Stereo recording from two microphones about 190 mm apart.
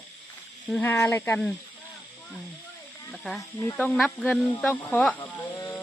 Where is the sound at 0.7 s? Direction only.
5° left (ahead or behind).